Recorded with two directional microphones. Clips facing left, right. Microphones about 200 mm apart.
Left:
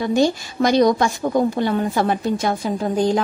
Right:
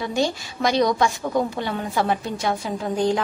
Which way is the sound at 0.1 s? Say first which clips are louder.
Left 8 dB; 45° left (ahead or behind).